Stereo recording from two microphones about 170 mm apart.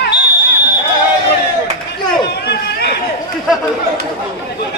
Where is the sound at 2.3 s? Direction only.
75° left (ahead or behind).